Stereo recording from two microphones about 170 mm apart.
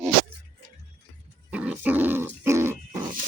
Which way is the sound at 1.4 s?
10° right (ahead or behind).